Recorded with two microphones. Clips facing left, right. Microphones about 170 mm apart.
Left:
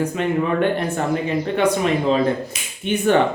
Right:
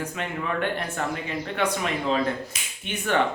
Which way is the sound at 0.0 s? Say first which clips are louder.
Left 10 dB; 30° left (ahead or behind).